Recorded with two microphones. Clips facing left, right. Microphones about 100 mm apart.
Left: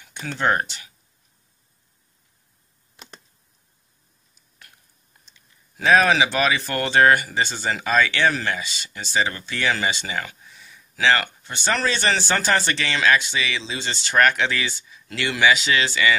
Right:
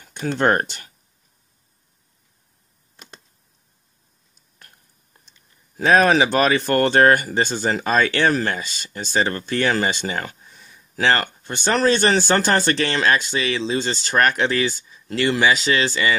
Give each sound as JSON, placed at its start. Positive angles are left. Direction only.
{"t": 0.0, "sound": "a sound", "side_deg": -45}
{"t": 0.4, "sound": "speech", "side_deg": -50}
{"t": 5.3, "sound": "speech", "side_deg": -40}